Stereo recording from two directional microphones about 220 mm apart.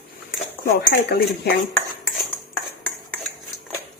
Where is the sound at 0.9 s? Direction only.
50° left (ahead or behind).